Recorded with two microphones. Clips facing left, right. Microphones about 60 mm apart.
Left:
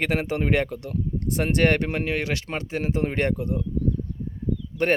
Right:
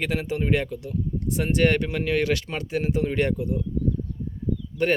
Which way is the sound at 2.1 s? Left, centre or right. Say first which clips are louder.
Right 3 dB; left.